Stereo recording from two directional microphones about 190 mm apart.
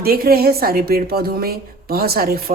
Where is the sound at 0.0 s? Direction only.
50° right (ahead or behind).